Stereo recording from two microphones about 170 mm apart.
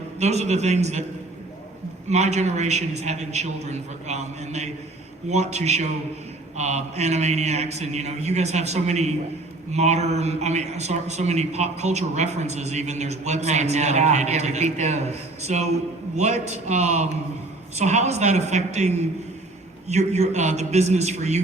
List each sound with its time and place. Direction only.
0.2 s a man's voice: 40° right (ahead or behind)
2.0 s a man's voice: 40° right (ahead or behind)